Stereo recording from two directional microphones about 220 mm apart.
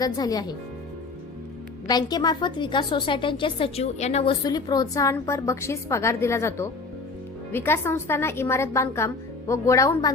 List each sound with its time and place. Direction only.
0.0 s a woman's voice: 15° left (ahead or behind)
1.9 s a woman's voice: 20° left (ahead or behind)